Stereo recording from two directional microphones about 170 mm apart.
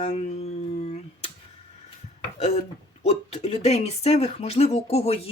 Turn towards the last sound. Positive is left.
turn(degrees=35)  # may be behind; listen again after turning